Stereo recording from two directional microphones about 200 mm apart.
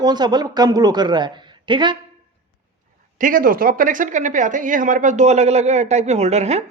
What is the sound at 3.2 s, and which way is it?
Speech, 45° right (ahead or behind).